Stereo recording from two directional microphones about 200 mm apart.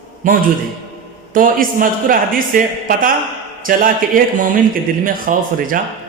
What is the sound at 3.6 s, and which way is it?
A man's voice, 45° right (ahead or behind).